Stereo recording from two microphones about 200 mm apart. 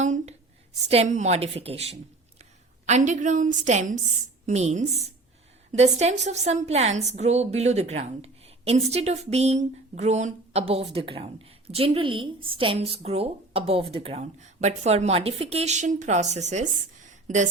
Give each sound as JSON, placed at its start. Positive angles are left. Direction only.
{"t": 0.0, "sound": "a woman's voice", "side_deg": -35}